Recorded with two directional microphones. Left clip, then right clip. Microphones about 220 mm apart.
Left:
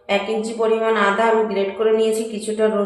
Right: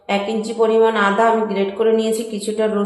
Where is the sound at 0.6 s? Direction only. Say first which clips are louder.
Right 3 dB; 40° right (ahead or behind).